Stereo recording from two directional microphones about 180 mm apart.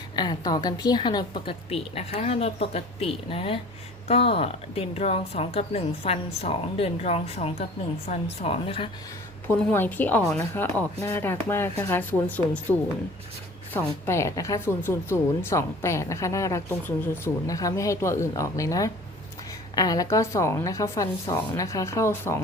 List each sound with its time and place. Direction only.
0.2 s a woman's voice: 20° left (ahead or behind)
9.7 s a woman's voice: 10° left (ahead or behind)
13.7 s a woman's voice: 15° left (ahead or behind)